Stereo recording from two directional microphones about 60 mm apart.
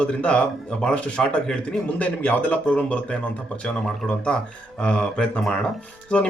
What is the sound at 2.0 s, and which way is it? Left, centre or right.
A man's voice, left.